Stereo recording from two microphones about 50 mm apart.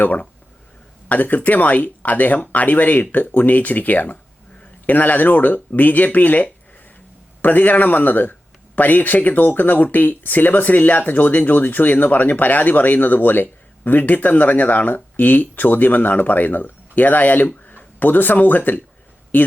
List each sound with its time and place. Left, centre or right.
1.0 s speech: left